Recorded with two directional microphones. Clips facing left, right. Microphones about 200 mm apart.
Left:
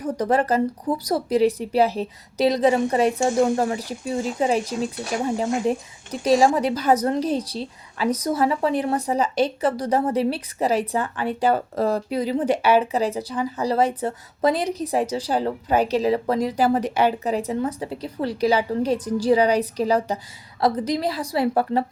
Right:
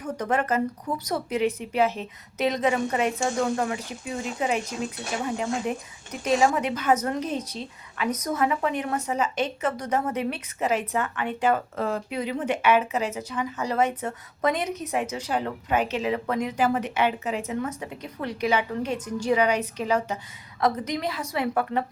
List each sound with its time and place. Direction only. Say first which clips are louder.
0.0 s a woman's voice: left 5 dB; 35° left (ahead or behind)